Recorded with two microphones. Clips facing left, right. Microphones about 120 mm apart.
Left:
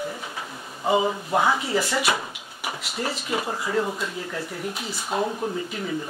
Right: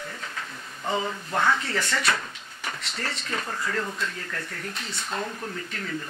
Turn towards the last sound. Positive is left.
turn(degrees=15)  # may be behind; listen again after turning